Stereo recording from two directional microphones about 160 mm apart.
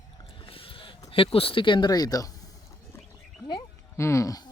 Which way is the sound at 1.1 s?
35° left (ahead or behind).